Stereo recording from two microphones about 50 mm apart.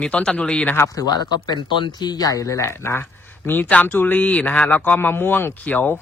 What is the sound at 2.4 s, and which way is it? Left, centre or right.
Speech, left.